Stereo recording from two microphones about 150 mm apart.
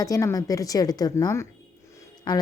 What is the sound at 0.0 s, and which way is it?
A woman's voice, 20° left (ahead or behind).